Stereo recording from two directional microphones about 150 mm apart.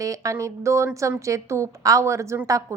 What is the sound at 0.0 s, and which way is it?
A woman's voice, 20° right (ahead or behind).